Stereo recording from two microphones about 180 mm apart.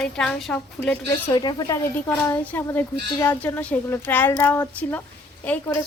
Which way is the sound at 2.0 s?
10° left (ahead or behind).